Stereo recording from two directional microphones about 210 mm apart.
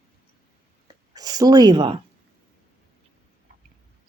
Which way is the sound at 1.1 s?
20° right (ahead or behind).